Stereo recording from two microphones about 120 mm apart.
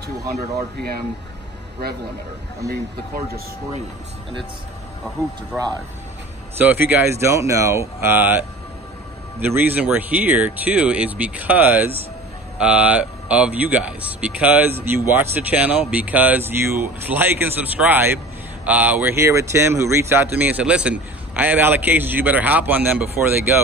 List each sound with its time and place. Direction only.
2.6 s speech: 25° right (ahead or behind)
5.5 s speech: 5° right (ahead or behind)
6.6 s speech: 15° right (ahead or behind)
9.4 s speech: 15° right (ahead or behind)